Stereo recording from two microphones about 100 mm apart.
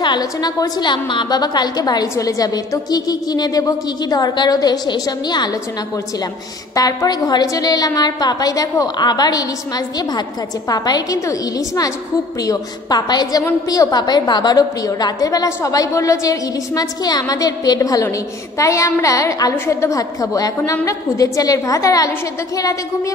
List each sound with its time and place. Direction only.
0.0 s a woman's voice: 45° left (ahead or behind)
6.7 s a woman's voice: 35° left (ahead or behind)
10.7 s a woman's voice: 40° left (ahead or behind)